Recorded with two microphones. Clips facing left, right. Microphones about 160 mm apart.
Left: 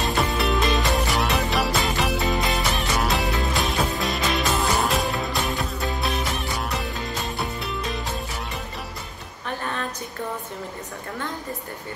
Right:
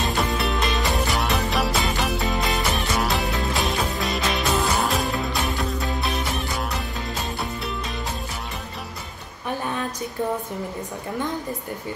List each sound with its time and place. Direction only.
0.2 s music: centre (ahead or behind)